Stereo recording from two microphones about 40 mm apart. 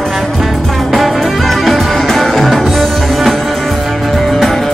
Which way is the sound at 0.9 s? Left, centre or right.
Centre.